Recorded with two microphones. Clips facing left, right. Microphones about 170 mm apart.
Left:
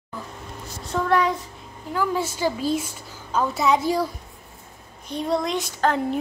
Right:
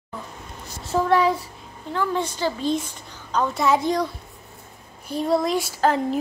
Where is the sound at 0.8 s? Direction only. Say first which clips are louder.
Right 2 dB; 5° right (ahead or behind).